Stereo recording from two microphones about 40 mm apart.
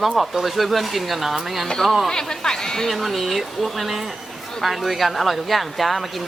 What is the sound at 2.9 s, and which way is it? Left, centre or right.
Speech, centre.